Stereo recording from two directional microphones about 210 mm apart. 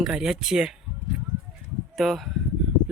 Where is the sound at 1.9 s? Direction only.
Centre (ahead or behind).